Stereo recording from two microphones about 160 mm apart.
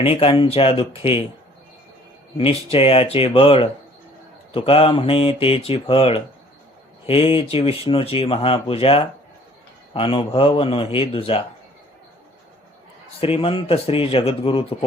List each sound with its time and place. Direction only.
0.0 s speech: 35° left (ahead or behind)
2.4 s speech: 35° left (ahead or behind)
13.1 s speech: 35° left (ahead or behind)